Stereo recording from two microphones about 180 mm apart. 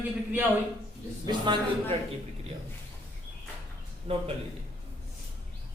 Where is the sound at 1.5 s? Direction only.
25° right (ahead or behind).